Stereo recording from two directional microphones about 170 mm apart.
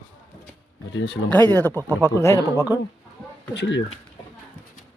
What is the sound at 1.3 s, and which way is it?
Speech, 10° left (ahead or behind).